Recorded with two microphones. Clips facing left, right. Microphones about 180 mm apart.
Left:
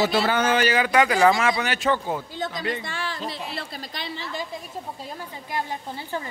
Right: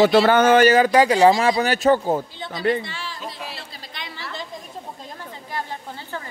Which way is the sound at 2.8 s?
55° left (ahead or behind).